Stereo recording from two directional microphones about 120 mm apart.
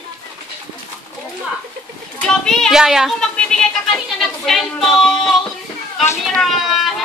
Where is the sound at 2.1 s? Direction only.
5° left (ahead or behind).